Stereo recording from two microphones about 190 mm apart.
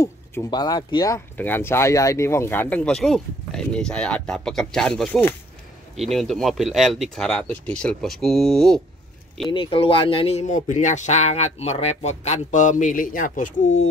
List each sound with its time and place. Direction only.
0.0 s speech: 15° left (ahead or behind)
9.5 s speech: 25° left (ahead or behind)